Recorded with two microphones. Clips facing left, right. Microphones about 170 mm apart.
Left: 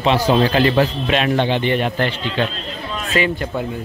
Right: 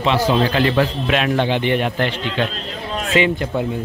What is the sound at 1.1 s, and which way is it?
A man's voice, 5° right (ahead or behind).